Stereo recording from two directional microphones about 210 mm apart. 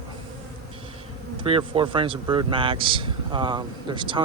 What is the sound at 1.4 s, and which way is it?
A man's voice, 25° right (ahead or behind).